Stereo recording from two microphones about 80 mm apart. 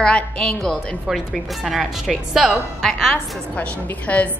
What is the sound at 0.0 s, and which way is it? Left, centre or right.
A woman's voice, centre.